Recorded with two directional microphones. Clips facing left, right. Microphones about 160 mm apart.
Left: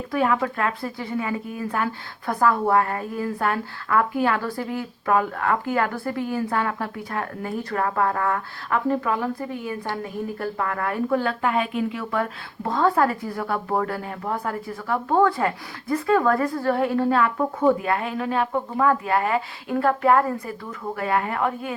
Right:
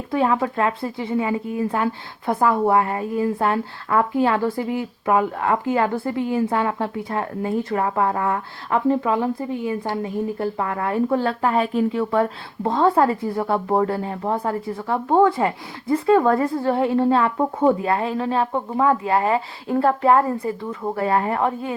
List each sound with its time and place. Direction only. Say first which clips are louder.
0.1 s speech: right 2 dB; 25° right (ahead or behind)